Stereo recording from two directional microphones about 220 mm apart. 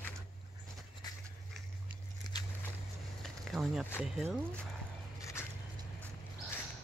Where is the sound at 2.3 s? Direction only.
20° left (ahead or behind).